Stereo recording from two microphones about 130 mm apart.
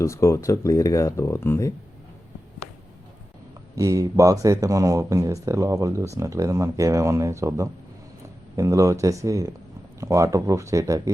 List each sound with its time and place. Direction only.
0.0 s speech: 20° left (ahead or behind)
3.8 s speech: 25° right (ahead or behind)